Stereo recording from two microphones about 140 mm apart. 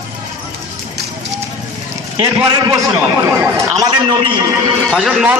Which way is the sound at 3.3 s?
15° right (ahead or behind).